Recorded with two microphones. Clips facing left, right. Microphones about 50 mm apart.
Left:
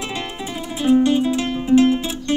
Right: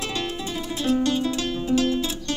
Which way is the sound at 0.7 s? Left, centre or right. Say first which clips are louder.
Left 7 dB; left.